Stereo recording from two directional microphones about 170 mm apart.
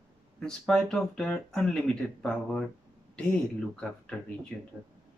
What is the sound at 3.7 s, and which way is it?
Speech, 5° left (ahead or behind).